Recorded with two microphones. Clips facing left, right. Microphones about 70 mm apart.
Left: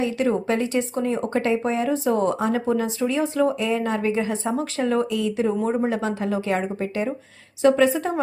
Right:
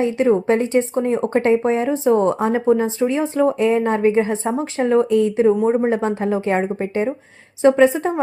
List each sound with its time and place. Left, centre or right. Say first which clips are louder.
0.0 s speech: right 6 dB; right